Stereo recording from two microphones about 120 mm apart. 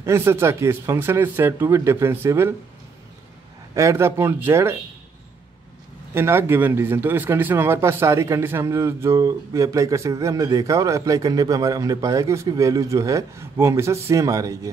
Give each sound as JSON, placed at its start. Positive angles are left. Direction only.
{"t": 0.0, "sound": "a man's voice", "side_deg": -20}
{"t": 3.7, "sound": "a man's voice", "side_deg": -25}
{"t": 6.1, "sound": "a man's voice", "side_deg": -20}